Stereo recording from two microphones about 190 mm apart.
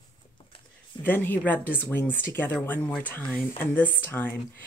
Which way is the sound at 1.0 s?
10° left (ahead or behind).